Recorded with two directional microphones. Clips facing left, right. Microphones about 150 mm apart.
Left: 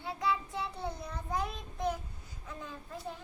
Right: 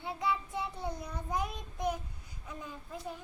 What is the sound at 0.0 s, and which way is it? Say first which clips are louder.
Child singing: left 1 dB; 20° right (ahead or behind).